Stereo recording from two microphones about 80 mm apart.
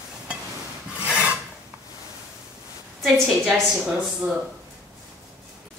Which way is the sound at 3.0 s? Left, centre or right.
Centre.